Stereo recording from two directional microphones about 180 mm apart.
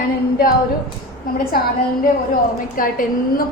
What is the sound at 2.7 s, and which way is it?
Speech, 50° left (ahead or behind).